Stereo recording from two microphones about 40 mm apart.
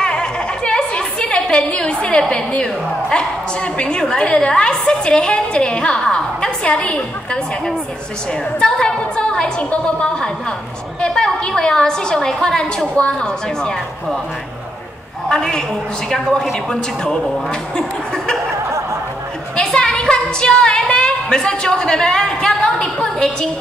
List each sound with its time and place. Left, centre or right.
0.0 s a sound: left
3.2 s a woman's voice: left
8.5 s a woman's voice: left
15.2 s a woman's voice: centre
17.0 s a woman's voice: left
19.6 s a sound: centre
20.9 s a woman's voice: centre